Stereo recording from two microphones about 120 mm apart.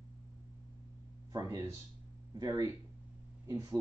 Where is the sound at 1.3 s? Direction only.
30° right (ahead or behind).